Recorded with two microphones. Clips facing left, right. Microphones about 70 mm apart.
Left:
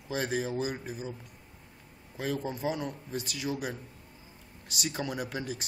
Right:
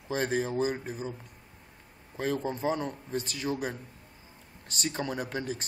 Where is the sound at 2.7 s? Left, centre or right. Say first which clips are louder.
Right 3 dB; centre.